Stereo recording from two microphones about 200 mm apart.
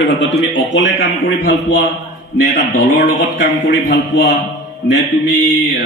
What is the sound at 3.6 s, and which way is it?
Speech, 60° left (ahead or behind).